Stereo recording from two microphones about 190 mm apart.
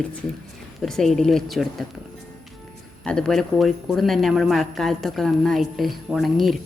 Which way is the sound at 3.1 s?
5° left (ahead or behind).